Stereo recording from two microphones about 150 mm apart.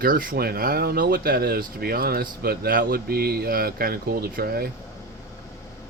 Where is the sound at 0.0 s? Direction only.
70° right (ahead or behind); by 4.7 s 90° right.